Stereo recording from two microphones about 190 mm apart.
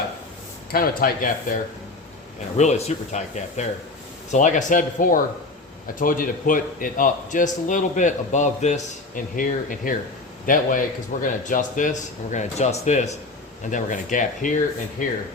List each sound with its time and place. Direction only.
0.7 s speech: 50° left (ahead or behind)
2.6 s speech: 35° left (ahead or behind)